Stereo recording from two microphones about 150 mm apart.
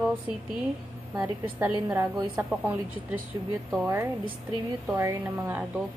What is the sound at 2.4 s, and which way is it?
Speech, 15° right (ahead or behind).